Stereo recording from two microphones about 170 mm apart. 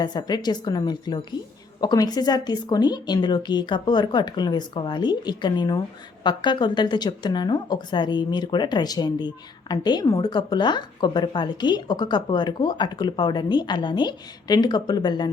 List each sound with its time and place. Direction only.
0.0 s speech: 25° left (ahead or behind)